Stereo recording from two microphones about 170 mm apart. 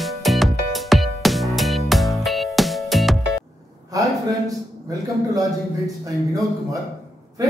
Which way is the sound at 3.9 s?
20° right (ahead or behind).